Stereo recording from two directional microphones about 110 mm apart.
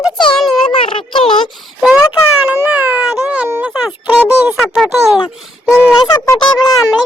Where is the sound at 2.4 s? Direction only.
10° right (ahead or behind).